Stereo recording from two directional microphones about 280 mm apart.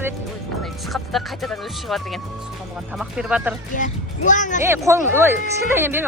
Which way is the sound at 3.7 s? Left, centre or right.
Left.